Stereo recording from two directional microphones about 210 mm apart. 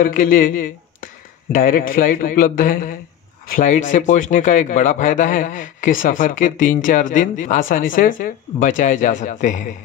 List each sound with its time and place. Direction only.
0.0 s a man's voice: 40° left (ahead or behind)